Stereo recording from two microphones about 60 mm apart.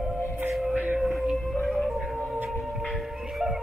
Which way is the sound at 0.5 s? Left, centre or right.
Centre.